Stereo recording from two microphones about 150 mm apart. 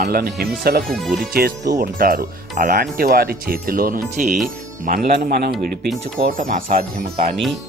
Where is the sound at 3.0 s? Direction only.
85° right.